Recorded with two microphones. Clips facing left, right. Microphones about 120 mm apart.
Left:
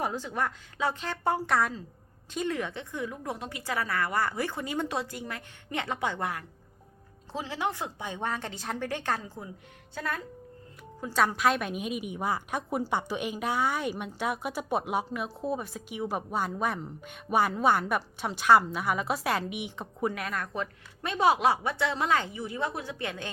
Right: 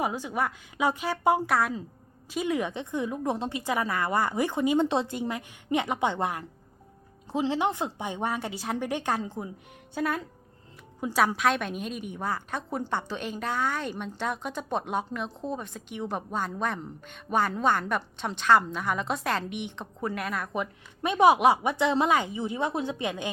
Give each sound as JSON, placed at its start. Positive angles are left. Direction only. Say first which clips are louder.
{"t": 0.0, "sound": "a woman's voice", "louder": "right 2 dB", "side_deg": -10}
{"t": 1.5, "sound": "a woman's voice", "louder": "right 1 dB", "side_deg": 0}
{"t": 20.5, "sound": "a woman's voice", "louder": "right 3 dB", "side_deg": -15}